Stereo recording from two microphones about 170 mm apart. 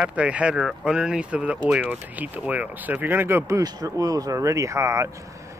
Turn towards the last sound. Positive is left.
turn(degrees=-15)  # may be behind; listen again after turning